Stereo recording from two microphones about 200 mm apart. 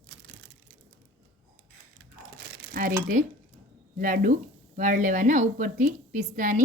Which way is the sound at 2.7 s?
45° right (ahead or behind).